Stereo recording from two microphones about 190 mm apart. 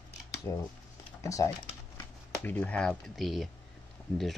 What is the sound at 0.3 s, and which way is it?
Scissors, 15° left (ahead or behind).